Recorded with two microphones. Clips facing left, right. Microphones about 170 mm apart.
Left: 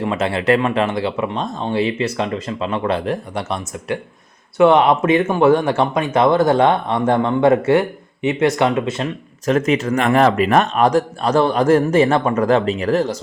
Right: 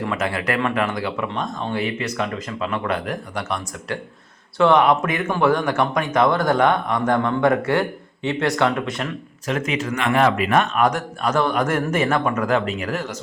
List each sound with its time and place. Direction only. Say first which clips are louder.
0.0 s speech: left 5 dB; 25° left (ahead or behind)
9.5 s a man's voice: left 7 dB; 40° left (ahead or behind)